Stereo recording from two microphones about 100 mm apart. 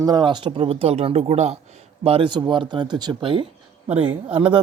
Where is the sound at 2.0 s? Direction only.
75° right (ahead or behind).